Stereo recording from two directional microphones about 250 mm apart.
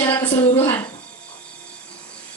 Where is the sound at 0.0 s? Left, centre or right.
Centre.